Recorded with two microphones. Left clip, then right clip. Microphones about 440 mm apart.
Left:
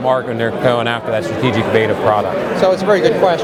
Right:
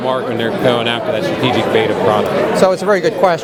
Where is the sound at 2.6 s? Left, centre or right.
Right.